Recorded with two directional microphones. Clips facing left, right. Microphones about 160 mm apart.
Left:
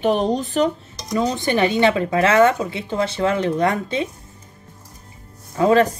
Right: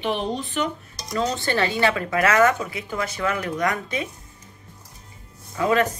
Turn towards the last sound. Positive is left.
turn(degrees=30)  # may be behind; listen again after turning